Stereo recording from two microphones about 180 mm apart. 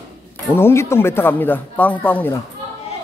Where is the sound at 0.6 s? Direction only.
15° left (ahead or behind).